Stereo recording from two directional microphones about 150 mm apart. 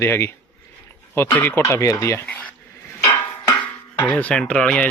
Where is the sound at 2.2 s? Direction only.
10° left (ahead or behind).